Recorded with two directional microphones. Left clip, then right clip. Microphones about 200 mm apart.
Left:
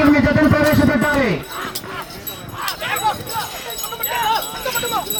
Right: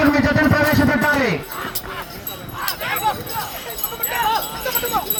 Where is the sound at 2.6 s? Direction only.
5° right (ahead or behind).